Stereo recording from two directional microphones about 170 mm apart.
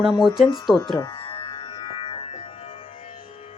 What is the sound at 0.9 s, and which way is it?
Music, 30° left (ahead or behind).